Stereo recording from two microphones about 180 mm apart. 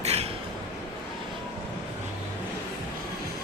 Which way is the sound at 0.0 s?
35° right (ahead or behind).